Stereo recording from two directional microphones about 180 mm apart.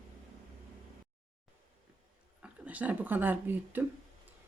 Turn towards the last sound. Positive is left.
turn(degrees=-10)  # may be behind; listen again after turning